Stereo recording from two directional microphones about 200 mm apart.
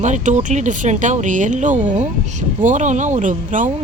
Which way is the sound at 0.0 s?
40° right (ahead or behind).